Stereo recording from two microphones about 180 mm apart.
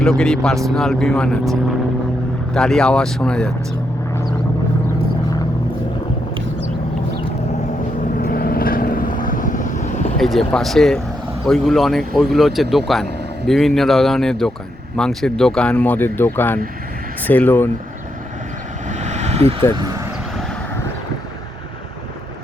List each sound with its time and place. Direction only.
0.0 s speech: 5° left (ahead or behind)
8.2 s vehicle: 55° left (ahead or behind)
10.2 s speech: centre (ahead or behind)
18.9 s vehicle: 40° right (ahead or behind)
19.7 s speech: 25° right (ahead or behind)